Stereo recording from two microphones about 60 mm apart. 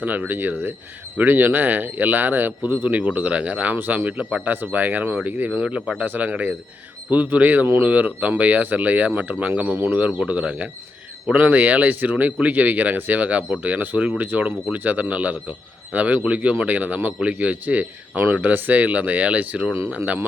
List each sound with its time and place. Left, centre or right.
0.0 s a man's voice: right
5.6 s speech: centre
6.1 s a man's voice: right